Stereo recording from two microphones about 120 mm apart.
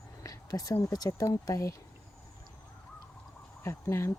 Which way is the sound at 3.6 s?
20° left (ahead or behind).